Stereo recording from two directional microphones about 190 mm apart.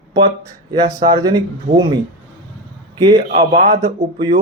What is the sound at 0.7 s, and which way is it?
Speech, 25° right (ahead or behind).